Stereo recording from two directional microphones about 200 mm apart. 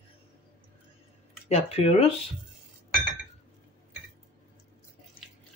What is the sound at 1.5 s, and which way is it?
Speech, 30° left (ahead or behind).